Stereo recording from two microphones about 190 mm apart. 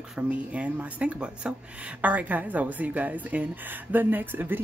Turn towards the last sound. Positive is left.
turn(degrees=-10)  # may be behind; listen again after turning